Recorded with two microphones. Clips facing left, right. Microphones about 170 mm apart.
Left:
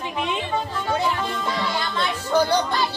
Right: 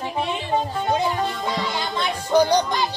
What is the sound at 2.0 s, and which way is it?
Music, 15° right (ahead or behind).